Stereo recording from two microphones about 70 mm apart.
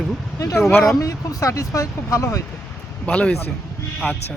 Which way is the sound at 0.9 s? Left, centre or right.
Left.